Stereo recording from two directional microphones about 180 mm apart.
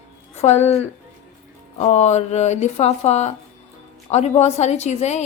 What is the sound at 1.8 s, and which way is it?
Speech, 40° left (ahead or behind).